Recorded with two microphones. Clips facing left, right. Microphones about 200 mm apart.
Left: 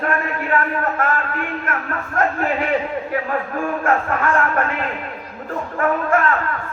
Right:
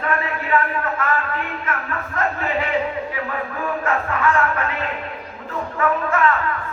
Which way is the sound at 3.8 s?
50° left (ahead or behind).